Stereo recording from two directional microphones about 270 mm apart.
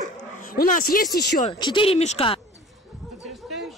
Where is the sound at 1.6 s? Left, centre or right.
Centre.